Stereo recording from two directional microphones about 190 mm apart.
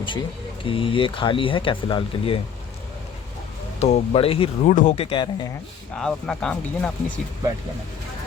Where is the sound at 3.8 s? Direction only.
30° left (ahead or behind).